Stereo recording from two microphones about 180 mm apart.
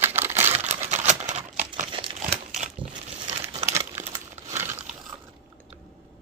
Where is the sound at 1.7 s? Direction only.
25° right (ahead or behind).